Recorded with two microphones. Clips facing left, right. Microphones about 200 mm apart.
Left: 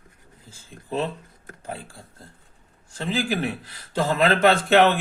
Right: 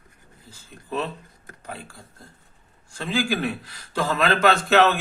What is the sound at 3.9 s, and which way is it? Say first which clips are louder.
A man's voice: left 2 dB; 25° left (ahead or behind).